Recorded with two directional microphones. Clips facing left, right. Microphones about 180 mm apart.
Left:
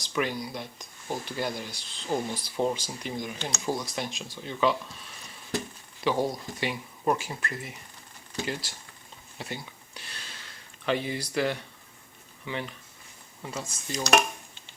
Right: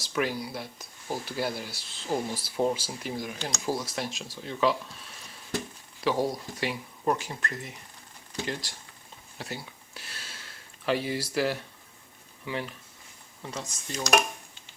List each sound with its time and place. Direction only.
0.0 s speech: 5° right (ahead or behind)
9.4 s a sound: centre (ahead or behind)
10.8 s speech: 5° right (ahead or behind)